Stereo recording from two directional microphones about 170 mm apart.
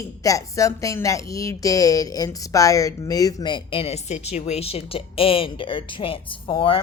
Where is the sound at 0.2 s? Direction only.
20° left (ahead or behind).